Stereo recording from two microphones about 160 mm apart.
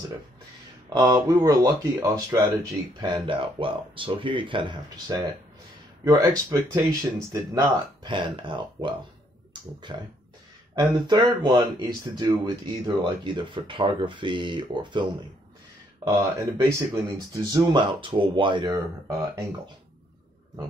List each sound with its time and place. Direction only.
0.8 s speech: 25° right (ahead or behind)
9.5 s finger snapping: 30° right (ahead or behind)
10.8 s speech: 25° right (ahead or behind)
16.0 s speech: 20° right (ahead or behind)